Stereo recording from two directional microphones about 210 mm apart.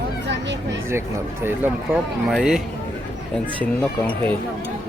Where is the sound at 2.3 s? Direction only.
Centre (ahead or behind).